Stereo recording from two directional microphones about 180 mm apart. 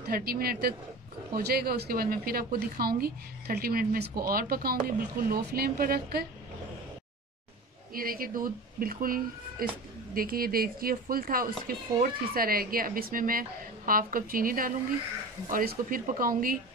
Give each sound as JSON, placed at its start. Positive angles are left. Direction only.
{"t": 0.0, "sound": "a woman's voice", "side_deg": -55}
{"t": 7.9, "sound": "speech", "side_deg": -55}